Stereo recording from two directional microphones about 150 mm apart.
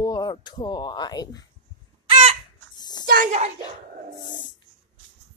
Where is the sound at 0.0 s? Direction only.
25° left (ahead or behind).